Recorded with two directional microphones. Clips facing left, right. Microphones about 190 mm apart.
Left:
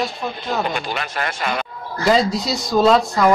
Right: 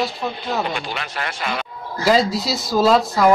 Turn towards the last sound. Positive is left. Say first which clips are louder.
# even
turn(degrees=0)  # may be behind; listen again after turning